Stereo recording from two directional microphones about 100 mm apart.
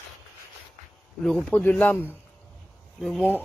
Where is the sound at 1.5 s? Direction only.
20° left (ahead or behind).